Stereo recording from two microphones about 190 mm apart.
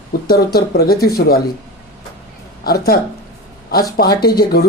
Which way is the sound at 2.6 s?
55° left (ahead or behind).